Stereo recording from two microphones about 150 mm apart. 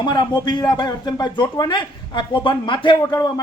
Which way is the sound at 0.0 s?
30° left (ahead or behind).